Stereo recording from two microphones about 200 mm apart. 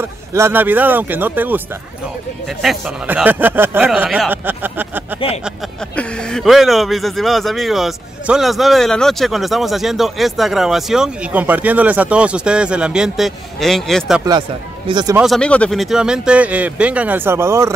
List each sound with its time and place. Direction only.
0.0 s speech: 10° right (ahead or behind)
5.9 s speech: 5° left (ahead or behind)
14.9 s speech: 20° right (ahead or behind)
15.1 s speech: centre (ahead or behind)